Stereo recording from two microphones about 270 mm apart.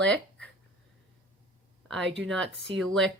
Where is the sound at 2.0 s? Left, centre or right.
Right.